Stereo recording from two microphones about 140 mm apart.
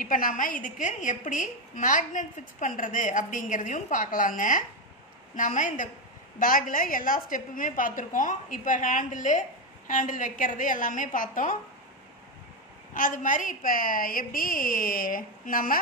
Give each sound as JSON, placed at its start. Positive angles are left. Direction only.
{"t": 0.0, "sound": "a woman's voice", "side_deg": 75}
{"t": 6.4, "sound": "a woman's voice", "side_deg": 85}
{"t": 12.9, "sound": "a woman's voice", "side_deg": 75}